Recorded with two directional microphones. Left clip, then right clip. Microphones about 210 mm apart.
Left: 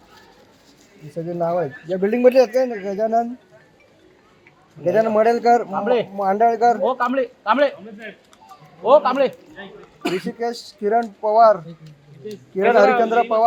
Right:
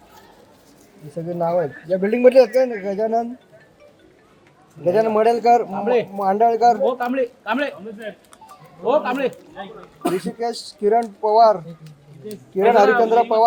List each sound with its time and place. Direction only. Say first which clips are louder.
1.1 s speech: right 1 dB; 35° left (ahead or behind)
4.8 s speech: even; 30° left (ahead or behind)
8.8 s speech: left 5 dB; 25° left (ahead or behind)